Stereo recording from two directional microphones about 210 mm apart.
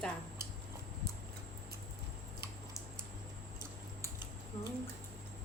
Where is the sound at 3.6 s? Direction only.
20° left (ahead or behind).